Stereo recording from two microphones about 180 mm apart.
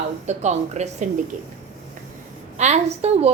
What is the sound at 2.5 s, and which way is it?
Speech, 40° right (ahead or behind).